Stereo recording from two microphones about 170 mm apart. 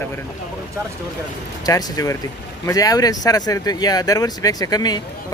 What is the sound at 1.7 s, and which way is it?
Speech, 20° left (ahead or behind).